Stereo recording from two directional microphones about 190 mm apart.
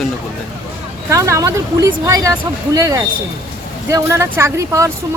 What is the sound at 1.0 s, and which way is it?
Speech, 15° right (ahead or behind).